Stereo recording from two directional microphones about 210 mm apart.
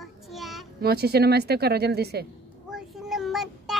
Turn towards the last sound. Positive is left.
turn(degrees=0)  # may be behind; listen again after turning